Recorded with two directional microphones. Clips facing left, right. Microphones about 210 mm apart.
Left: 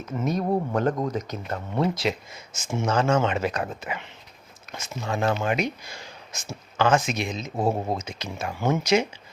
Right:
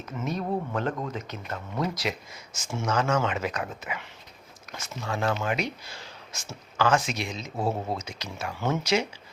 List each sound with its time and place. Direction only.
0.2 s speech: 40° left (ahead or behind)
4.7 s speech: 20° left (ahead or behind)
5.8 s speech: 15° left (ahead or behind)